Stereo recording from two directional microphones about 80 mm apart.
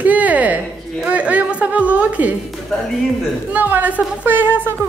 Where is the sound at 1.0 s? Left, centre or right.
Centre.